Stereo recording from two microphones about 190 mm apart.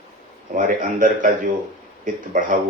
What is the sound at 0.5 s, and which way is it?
A man's voice, 45° right (ahead or behind).